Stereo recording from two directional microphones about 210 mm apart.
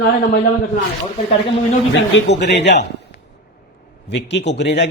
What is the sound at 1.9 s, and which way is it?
Speech, 60° left (ahead or behind).